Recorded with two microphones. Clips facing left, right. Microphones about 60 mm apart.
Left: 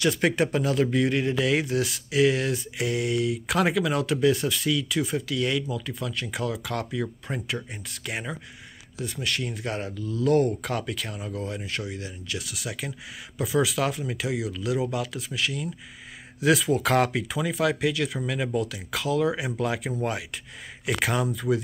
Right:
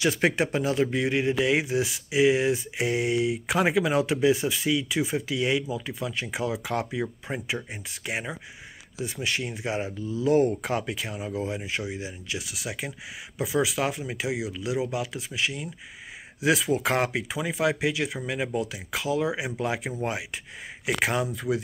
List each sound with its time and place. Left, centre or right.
0.4 s speech: centre